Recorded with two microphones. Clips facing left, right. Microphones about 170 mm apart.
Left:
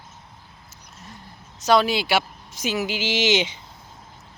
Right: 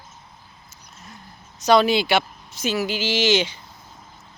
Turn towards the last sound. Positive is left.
turn(degrees=20)  # may be behind; listen again after turning